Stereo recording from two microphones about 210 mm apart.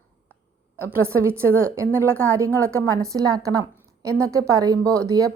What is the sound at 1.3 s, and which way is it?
Speech, 10° right (ahead or behind).